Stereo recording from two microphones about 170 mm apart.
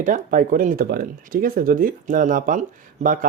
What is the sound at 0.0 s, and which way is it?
Speech, 50° right (ahead or behind).